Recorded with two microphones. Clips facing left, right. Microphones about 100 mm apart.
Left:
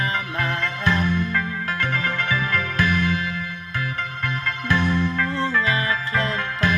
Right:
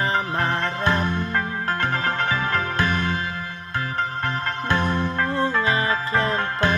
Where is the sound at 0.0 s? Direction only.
30° right (ahead or behind).